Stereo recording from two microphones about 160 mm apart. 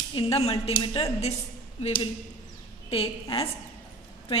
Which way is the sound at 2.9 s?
35° left (ahead or behind).